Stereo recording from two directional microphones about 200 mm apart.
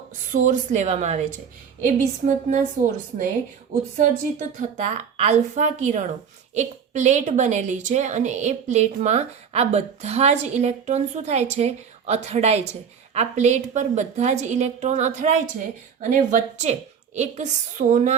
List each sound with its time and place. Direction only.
0.3 s a woman's voice: 40° right (ahead or behind)
3.7 s a woman's voice: 40° right (ahead or behind)